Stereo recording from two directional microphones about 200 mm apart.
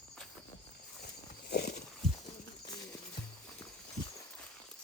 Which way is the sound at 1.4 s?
55° left (ahead or behind).